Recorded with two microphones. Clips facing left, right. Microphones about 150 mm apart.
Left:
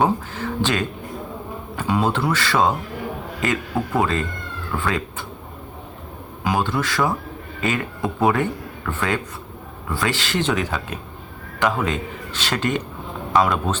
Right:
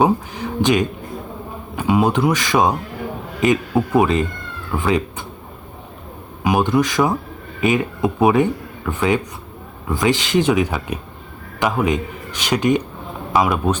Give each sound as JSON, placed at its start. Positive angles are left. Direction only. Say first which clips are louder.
{"t": 0.0, "sound": "a man's voice", "louder": "right 3 dB", "side_deg": -15}
{"t": 6.4, "sound": "a man's voice", "louder": "right 5 dB", "side_deg": -15}